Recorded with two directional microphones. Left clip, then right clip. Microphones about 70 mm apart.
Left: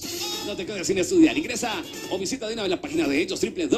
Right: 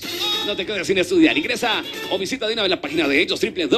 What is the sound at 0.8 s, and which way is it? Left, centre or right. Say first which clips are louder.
A man's voice: right 3 dB; centre.